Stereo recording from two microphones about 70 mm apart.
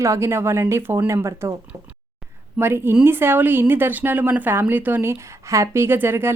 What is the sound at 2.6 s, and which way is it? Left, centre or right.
Speech, right.